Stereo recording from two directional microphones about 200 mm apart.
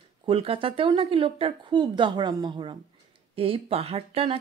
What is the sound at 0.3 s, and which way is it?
A woman's voice, 25° right (ahead or behind).